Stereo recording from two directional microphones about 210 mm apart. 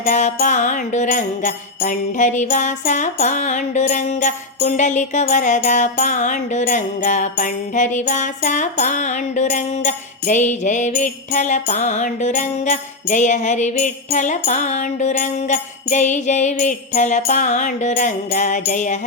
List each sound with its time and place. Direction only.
0.0 s music: 35° left (ahead or behind)